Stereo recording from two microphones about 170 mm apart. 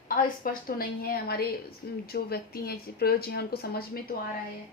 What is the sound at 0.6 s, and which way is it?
A woman's voice, 60° left (ahead or behind).